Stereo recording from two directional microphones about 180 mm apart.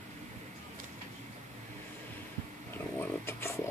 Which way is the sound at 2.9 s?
15° left (ahead or behind).